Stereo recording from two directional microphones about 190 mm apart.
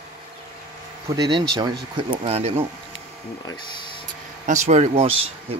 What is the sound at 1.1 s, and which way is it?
Speech, 20° right (ahead or behind).